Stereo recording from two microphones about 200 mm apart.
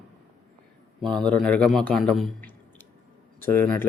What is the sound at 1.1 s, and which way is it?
A man's voice, 5° left (ahead or behind).